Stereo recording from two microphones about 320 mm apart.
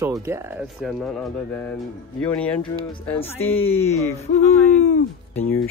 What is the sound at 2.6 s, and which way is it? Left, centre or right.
Music, centre.